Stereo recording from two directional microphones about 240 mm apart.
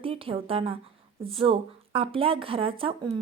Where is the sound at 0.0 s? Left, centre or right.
Right.